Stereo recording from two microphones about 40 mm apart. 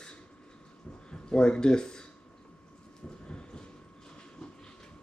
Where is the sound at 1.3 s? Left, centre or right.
Left.